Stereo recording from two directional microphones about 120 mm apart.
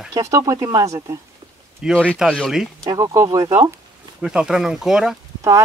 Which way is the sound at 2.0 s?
5° right (ahead or behind).